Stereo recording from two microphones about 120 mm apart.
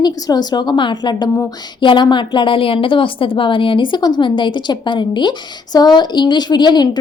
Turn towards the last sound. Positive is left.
turn(degrees=35)  # may be behind; listen again after turning